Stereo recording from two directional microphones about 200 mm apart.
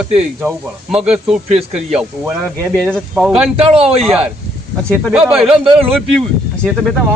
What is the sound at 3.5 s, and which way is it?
Speech, 30° right (ahead or behind).